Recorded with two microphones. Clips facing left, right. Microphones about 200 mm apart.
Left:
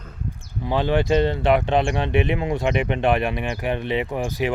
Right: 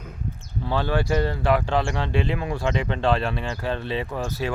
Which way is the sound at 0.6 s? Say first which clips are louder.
Left 3 dB; 15° left (ahead or behind).